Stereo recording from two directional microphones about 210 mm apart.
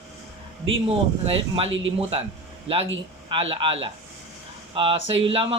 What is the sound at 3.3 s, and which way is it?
Speech, 25° right (ahead or behind).